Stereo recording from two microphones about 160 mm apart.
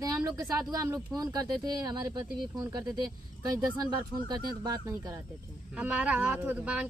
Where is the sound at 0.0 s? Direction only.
25° right (ahead or behind).